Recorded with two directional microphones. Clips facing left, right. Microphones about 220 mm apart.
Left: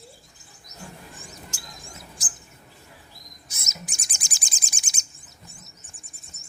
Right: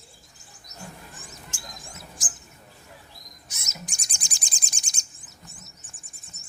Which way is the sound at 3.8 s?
Centre (ahead or behind).